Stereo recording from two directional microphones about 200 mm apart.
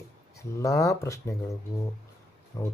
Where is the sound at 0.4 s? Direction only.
15° left (ahead or behind).